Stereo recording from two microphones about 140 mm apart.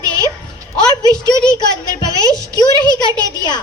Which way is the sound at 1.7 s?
30° left (ahead or behind).